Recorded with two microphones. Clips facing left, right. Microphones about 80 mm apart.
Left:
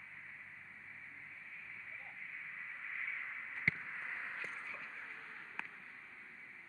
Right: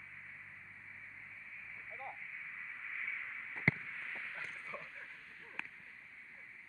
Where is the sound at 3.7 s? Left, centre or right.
Centre.